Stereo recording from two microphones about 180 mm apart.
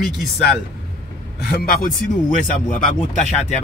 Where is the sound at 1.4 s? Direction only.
50° left (ahead or behind).